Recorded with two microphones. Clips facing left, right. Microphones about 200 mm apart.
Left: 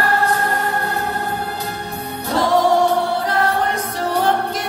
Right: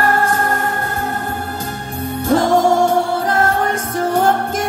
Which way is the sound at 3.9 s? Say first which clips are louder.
Right 4 dB; 45° right (ahead or behind).